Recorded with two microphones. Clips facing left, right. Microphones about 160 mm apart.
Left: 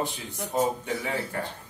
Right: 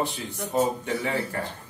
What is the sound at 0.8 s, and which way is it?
Speech, 10° left (ahead or behind).